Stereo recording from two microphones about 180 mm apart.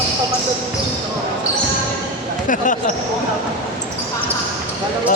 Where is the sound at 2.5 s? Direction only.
45° left (ahead or behind).